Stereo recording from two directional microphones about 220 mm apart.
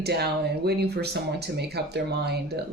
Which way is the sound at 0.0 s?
45° right (ahead or behind).